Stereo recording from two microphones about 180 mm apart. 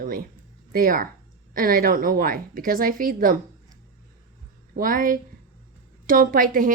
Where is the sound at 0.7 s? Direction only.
50° right (ahead or behind).